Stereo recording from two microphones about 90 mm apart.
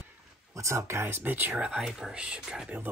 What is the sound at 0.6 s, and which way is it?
Speech, 30° right (ahead or behind).